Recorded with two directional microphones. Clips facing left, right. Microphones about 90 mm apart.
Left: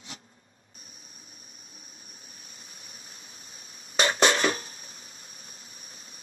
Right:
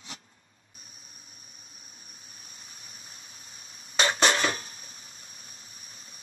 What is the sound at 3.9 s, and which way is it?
Music, 30° left (ahead or behind).